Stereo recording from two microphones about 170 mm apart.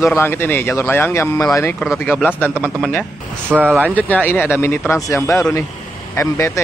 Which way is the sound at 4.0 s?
10° left (ahead or behind).